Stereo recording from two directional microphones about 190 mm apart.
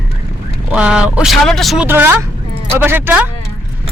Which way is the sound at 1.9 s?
10° right (ahead or behind).